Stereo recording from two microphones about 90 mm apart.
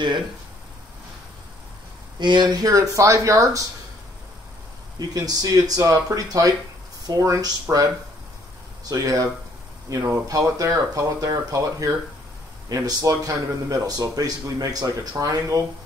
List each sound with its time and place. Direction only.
2.1 s speech: 55° right (ahead or behind); by 3.6 s 35° right (ahead or behind)
4.9 s speech: 45° right (ahead or behind)
8.8 s speech: 40° right (ahead or behind)